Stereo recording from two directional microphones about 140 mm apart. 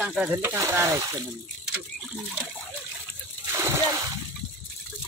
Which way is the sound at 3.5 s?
20° right (ahead or behind).